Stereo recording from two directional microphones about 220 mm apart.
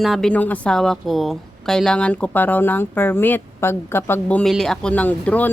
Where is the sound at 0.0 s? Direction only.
Centre (ahead or behind).